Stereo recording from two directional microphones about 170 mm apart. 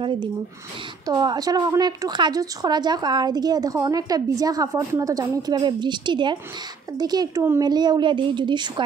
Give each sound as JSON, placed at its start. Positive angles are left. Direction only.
{"t": 0.0, "sound": "a woman's voice", "side_deg": -30}